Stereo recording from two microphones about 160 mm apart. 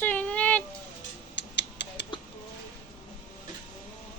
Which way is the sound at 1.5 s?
90° left.